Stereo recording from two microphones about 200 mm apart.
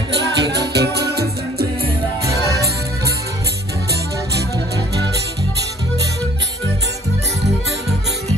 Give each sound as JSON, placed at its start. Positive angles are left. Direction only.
{"t": 0.1, "sound": "music", "side_deg": -55}